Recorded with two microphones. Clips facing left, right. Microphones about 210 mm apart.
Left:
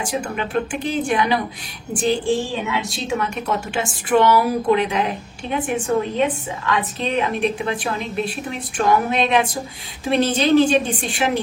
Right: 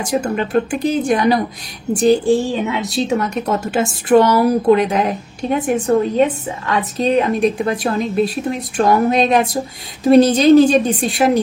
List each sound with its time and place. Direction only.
0.0 s a woman's voice: 40° right (ahead or behind)